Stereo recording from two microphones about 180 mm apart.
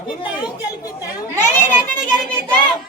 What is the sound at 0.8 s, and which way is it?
Speech, 20° left (ahead or behind).